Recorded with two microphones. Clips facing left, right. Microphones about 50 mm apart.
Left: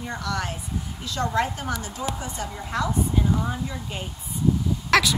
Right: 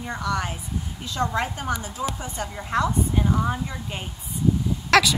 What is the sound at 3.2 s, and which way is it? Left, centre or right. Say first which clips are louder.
Speech: right 2 dB; centre.